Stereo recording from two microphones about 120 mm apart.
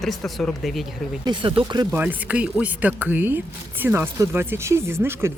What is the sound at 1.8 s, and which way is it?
Speech, 10° right (ahead or behind).